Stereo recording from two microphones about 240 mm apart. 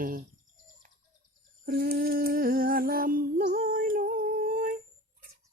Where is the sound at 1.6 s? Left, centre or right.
Right.